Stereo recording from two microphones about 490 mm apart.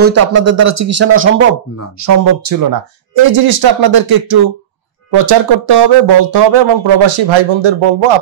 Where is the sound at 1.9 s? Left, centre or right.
Right.